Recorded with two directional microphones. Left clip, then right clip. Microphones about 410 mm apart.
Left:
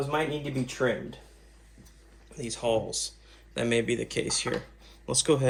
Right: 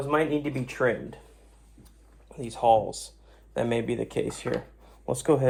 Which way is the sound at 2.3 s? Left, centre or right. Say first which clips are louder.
Right 7 dB; centre.